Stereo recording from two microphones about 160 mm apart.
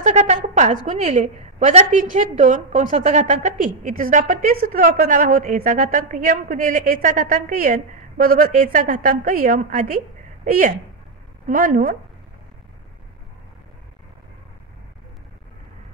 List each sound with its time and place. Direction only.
0.0 s a woman's voice: 45° right (ahead or behind)